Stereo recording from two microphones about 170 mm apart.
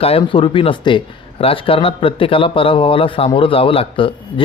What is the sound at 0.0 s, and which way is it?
Speech, 35° left (ahead or behind).